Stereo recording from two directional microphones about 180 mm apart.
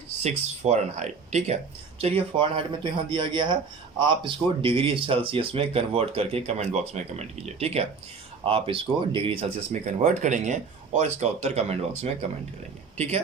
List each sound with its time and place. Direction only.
0.2 s speech: 40° right (ahead or behind)